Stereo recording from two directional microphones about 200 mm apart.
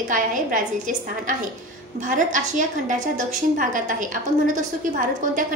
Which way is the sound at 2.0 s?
40° right (ahead or behind).